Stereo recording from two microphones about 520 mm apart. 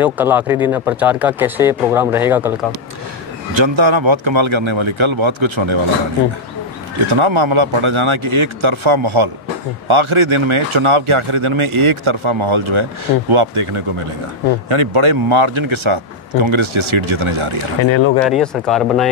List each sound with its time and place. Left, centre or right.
0.0 s speech: centre
3.5 s speech: right
7.1 s speech: right
18.2 s speech: centre